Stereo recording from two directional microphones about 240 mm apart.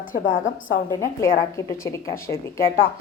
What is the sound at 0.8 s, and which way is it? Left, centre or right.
A woman's voice, centre.